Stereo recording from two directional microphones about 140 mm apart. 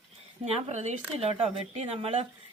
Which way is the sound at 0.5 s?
55° right (ahead or behind).